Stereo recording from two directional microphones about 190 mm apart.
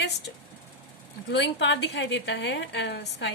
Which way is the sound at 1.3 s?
70° left (ahead or behind).